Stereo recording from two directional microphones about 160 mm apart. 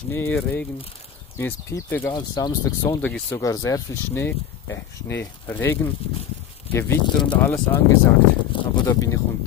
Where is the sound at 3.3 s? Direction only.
20° left (ahead or behind).